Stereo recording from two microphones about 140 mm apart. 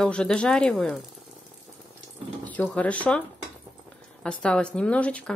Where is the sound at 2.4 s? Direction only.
10° left (ahead or behind).